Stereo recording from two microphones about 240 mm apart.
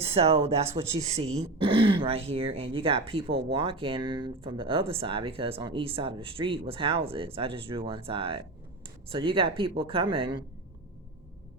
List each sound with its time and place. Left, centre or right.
0.0 s speech: right